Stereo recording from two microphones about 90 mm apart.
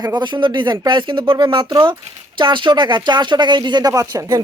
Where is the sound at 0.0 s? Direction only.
55° right (ahead or behind); by 4.4 s 35° right (ahead or behind).